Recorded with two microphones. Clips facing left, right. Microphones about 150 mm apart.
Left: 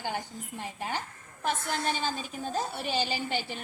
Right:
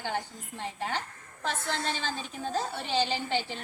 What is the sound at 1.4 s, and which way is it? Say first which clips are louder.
A woman's voice: left 2 dB; 15° left (ahead or behind).